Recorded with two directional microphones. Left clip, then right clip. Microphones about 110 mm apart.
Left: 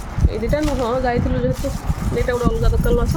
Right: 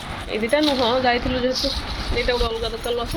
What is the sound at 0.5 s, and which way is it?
Speech, 25° left (ahead or behind).